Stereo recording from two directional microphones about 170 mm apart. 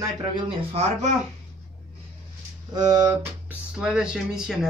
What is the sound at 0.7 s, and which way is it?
Speech, 40° right (ahead or behind).